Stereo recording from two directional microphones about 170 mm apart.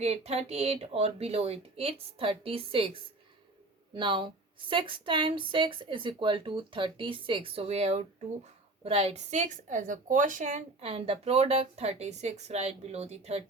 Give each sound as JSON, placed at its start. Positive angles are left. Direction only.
{"t": 0.0, "sound": "a woman's voice", "side_deg": -40}